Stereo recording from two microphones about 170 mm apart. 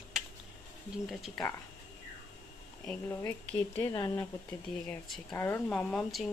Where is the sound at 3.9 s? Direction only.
20° left (ahead or behind).